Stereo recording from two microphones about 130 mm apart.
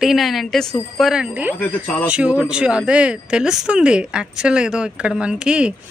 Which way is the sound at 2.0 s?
10° right (ahead or behind).